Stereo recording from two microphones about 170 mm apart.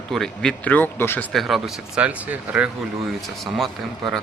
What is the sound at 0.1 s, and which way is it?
Speech, 5° left (ahead or behind).